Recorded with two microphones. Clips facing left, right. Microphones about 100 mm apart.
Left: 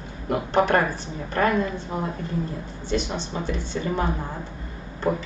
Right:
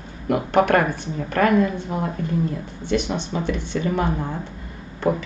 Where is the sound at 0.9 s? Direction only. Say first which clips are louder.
Right 3 dB; 50° right (ahead or behind).